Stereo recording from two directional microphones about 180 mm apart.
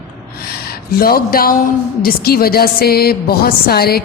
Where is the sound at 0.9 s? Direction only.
55° left (ahead or behind).